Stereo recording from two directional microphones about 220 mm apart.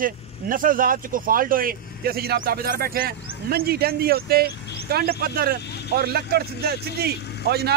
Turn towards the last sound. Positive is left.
turn(degrees=-45)  # may be behind; listen again after turning